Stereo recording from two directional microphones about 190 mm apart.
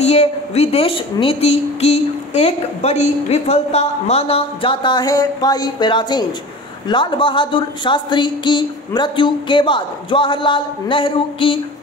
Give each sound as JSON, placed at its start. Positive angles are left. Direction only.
{"t": 0.0, "sound": "a woman's voice", "side_deg": 35}